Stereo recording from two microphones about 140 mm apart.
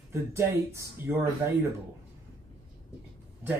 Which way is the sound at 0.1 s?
20° right (ahead or behind).